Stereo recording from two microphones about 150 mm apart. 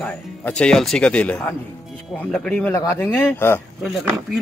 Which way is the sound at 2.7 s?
15° left (ahead or behind).